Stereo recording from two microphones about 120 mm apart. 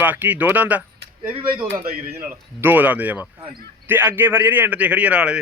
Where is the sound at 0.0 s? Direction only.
15° right (ahead or behind).